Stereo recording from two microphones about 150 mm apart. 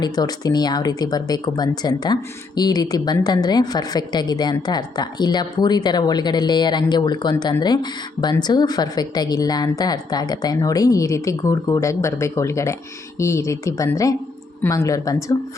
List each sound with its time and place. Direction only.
0.0 s speech: 25° left (ahead or behind)